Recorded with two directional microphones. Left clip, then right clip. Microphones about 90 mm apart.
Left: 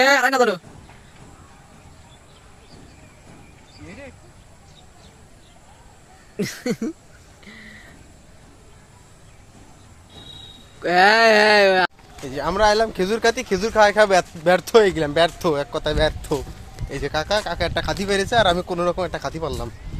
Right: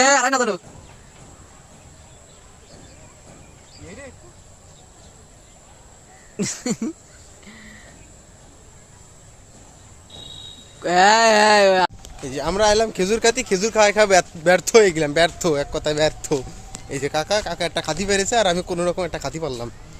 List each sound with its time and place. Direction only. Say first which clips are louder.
6.3 s speech: left 1 dB; 25° right (ahead or behind)
7.4 s a sound: left 2 dB; 20° right (ahead or behind)
10.8 s speech: even; 25° right (ahead or behind)
16.0 s speech: right 2 dB; 40° right (ahead or behind)
16.9 s speech: right 1 dB; 30° right (ahead or behind)